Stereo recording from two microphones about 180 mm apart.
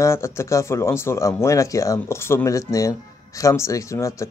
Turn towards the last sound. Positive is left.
turn(degrees=15)  # may be behind; listen again after turning